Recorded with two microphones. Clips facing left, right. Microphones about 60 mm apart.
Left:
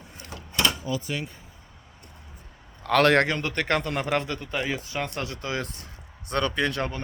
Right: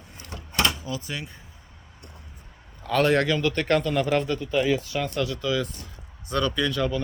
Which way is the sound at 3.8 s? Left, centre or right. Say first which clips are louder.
Right 4 dB; left.